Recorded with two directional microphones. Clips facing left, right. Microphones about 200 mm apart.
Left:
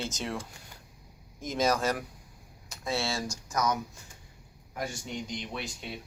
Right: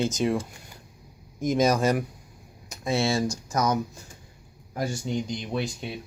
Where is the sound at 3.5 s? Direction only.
30° right (ahead or behind).